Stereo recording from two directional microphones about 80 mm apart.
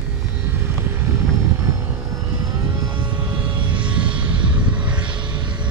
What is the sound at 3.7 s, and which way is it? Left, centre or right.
Vehicle, centre.